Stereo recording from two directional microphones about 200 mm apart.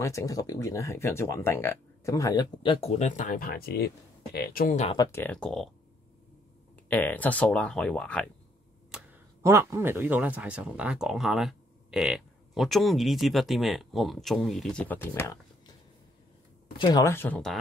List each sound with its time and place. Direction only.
0.0 s speech: 15° left (ahead or behind); by 4.7 s 50° left (ahead or behind)
4.9 s speech: 15° left (ahead or behind)
6.9 s speech: 10° left (ahead or behind)
8.9 s speech: 15° right (ahead or behind); by 15.7 s 15° left (ahead or behind)
16.7 s speech: 20° left (ahead or behind); by 17.6 s 5° left (ahead or behind)